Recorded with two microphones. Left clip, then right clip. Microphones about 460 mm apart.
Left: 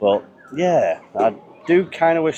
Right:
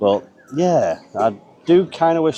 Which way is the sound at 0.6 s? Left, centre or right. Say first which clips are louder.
Even; right.